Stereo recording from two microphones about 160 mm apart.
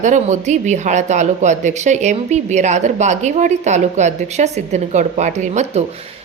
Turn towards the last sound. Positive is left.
turn(degrees=-45)  # may be behind; listen again after turning